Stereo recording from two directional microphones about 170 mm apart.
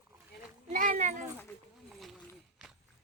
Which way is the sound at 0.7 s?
50° right (ahead or behind).